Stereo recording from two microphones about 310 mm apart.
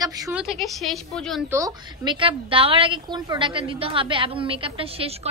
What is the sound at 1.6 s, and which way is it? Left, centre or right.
A woman's voice, centre.